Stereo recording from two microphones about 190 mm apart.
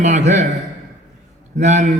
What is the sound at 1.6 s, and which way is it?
Speech, 40° right (ahead or behind).